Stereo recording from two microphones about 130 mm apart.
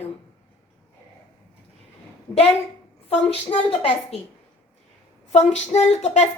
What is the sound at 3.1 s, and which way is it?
A woman's voice, 45° left (ahead or behind).